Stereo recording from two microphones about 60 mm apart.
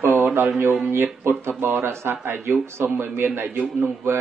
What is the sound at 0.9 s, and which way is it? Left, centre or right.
A man's voice, right.